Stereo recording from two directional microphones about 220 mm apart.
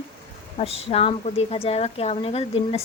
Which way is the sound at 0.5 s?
25° left (ahead or behind).